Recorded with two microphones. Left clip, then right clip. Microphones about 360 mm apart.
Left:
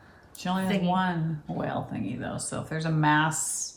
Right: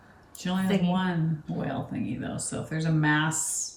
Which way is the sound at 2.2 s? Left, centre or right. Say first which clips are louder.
Left 1 dB; centre.